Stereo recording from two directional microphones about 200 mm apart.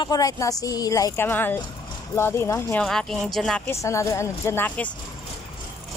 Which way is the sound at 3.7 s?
15° left (ahead or behind).